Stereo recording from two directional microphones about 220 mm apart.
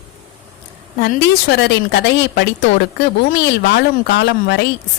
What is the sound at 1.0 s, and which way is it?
A woman's voice, 50° left (ahead or behind).